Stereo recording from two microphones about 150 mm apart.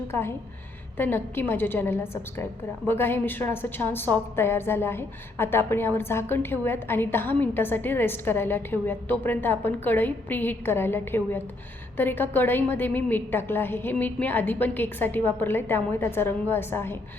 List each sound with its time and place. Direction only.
0.1 s a woman's voice: 15° left (ahead or behind)